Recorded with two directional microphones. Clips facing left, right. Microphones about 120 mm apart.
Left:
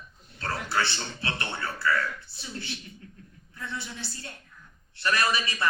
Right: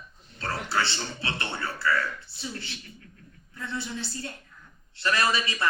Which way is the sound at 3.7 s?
25° right (ahead or behind).